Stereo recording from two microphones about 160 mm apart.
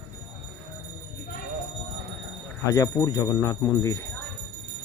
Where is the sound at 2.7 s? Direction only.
20° left (ahead or behind).